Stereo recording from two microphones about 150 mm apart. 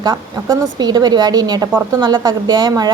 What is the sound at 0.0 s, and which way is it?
A woman's voice, 25° right (ahead or behind).